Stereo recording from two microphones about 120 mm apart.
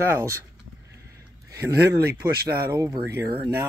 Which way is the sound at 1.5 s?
25° right (ahead or behind).